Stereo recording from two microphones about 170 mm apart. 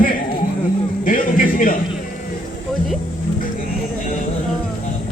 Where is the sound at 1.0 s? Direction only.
55° left (ahead or behind).